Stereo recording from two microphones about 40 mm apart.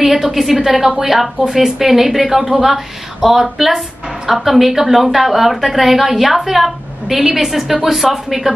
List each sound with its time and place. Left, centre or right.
0.0 s a woman's voice: centre